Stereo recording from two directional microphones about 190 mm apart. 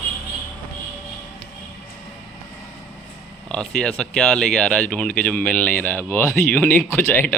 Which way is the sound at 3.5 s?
5° left (ahead or behind).